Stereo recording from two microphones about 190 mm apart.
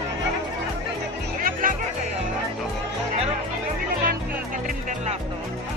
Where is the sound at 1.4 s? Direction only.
45° right (ahead or behind).